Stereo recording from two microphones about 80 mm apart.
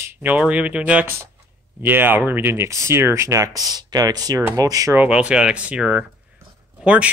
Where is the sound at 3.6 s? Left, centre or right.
Right.